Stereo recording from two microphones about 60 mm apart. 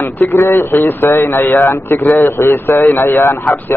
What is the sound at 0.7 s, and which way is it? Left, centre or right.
A man's voice, left.